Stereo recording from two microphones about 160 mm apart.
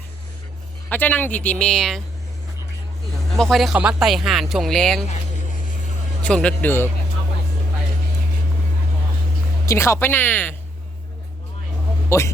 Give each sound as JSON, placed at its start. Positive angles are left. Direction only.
{"t": 0.9, "sound": "speech", "side_deg": 10}
{"t": 3.5, "sound": "speech", "side_deg": 0}
{"t": 6.2, "sound": "speech", "side_deg": 5}
{"t": 9.6, "sound": "speech", "side_deg": 15}
{"t": 12.0, "sound": "speech", "side_deg": 15}